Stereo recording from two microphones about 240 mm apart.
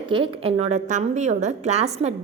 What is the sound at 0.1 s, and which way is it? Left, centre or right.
A woman's voice, right.